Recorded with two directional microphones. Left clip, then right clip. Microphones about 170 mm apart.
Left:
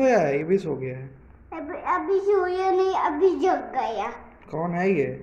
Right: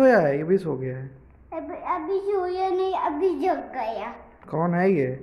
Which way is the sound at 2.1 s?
25° right (ahead or behind).